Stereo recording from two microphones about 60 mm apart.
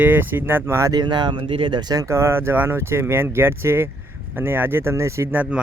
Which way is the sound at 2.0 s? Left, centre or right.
Right.